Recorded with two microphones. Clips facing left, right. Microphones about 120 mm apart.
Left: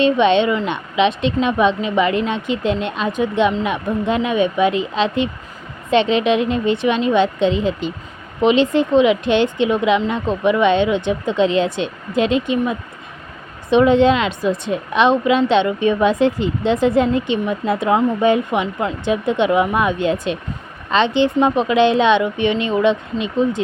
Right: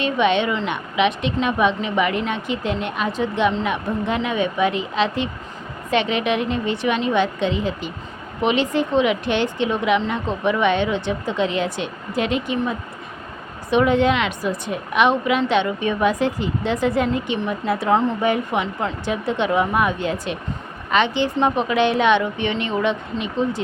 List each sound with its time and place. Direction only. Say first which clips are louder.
0.0 s speech: left 5 dB; 25° left (ahead or behind)